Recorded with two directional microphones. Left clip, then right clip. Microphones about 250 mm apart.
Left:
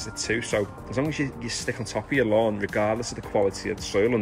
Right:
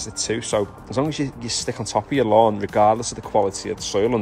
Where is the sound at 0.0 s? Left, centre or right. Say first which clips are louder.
Right 2 dB; centre.